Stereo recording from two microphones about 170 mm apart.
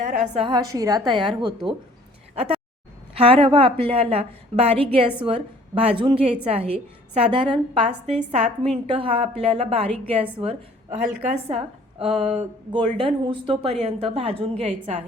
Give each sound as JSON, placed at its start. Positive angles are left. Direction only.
{"t": 0.0, "sound": "a woman's voice", "side_deg": -45}
{"t": 0.4, "sound": "a woman's voice", "side_deg": -25}
{"t": 3.2, "sound": "a woman's voice", "side_deg": -30}